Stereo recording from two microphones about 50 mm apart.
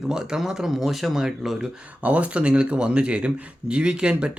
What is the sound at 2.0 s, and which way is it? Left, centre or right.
A man's voice, right.